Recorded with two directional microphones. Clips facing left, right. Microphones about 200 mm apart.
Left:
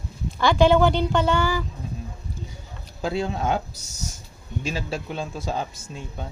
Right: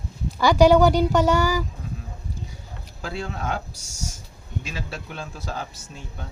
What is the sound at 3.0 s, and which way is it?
Speech, 20° left (ahead or behind).